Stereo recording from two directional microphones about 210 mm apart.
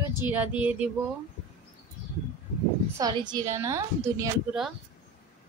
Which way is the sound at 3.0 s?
20° right (ahead or behind).